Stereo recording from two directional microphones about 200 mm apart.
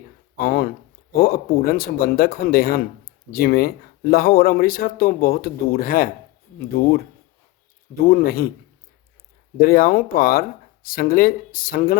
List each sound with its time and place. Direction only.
0.3 s speech: 45° left (ahead or behind)
8.0 s speech: 45° left (ahead or behind)
9.6 s speech: 45° left (ahead or behind)